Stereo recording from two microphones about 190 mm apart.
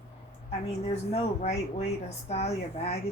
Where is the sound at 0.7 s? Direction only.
35° left (ahead or behind).